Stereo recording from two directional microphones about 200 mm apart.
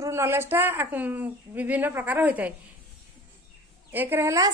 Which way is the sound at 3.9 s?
10° right (ahead or behind).